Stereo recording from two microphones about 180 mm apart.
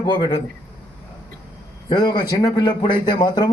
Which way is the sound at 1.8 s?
25° left (ahead or behind).